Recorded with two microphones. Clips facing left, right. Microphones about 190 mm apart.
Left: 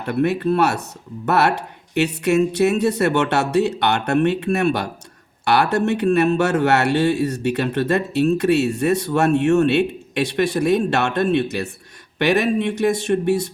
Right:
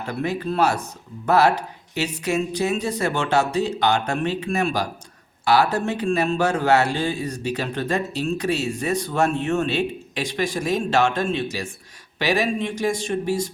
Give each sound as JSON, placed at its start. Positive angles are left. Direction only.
{"t": 0.0, "sound": "a man's voice", "side_deg": 65}